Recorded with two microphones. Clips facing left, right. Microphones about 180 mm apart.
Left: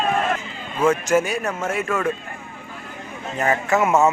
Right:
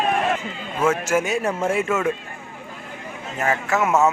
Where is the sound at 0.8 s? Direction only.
5° right (ahead or behind).